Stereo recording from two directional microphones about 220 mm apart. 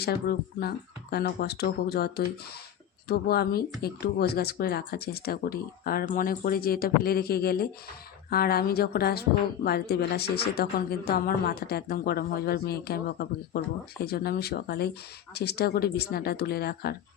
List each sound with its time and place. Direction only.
0.0 s speech: 45° left (ahead or behind)